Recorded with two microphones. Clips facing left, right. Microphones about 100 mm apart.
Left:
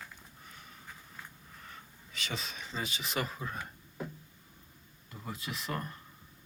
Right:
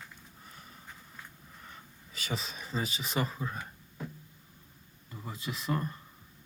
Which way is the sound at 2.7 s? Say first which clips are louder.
Right 4 dB; 35° right (ahead or behind).